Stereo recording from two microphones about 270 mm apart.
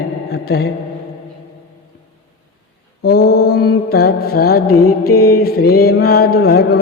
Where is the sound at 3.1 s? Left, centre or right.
Left.